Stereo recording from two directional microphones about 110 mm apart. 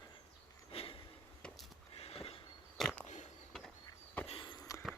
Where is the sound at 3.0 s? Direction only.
90° left.